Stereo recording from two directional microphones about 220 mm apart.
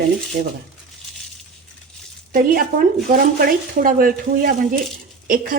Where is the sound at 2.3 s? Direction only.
40° right (ahead or behind).